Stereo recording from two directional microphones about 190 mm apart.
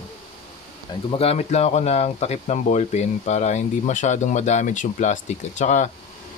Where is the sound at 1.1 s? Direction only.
30° left (ahead or behind).